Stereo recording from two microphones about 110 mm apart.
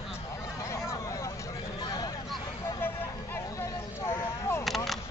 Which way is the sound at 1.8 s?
35° left (ahead or behind).